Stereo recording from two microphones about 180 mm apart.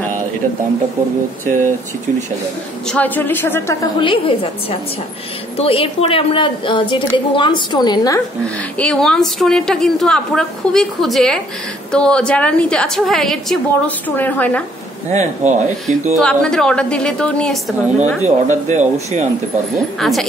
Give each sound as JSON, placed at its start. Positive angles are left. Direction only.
{"t": 2.9, "sound": "speech", "side_deg": 10}
{"t": 4.0, "sound": "a woman's voice", "side_deg": 30}
{"t": 8.7, "sound": "a woman's voice", "side_deg": 5}
{"t": 15.0, "sound": "speech", "side_deg": -40}
{"t": 16.2, "sound": "a woman's voice", "side_deg": 5}
{"t": 17.8, "sound": "speech", "side_deg": -10}
{"t": 18.5, "sound": "speech", "side_deg": -40}
{"t": 20.0, "sound": "a woman's voice", "side_deg": 0}